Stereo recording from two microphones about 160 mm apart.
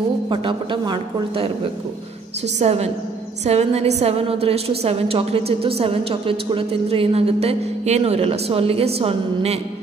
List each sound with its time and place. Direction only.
0.3 s a woman's voice: 30° right (ahead or behind)